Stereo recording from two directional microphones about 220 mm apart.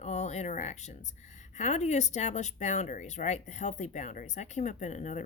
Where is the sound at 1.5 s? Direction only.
30° left (ahead or behind).